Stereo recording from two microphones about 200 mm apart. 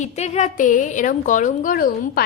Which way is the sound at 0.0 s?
35° left (ahead or behind).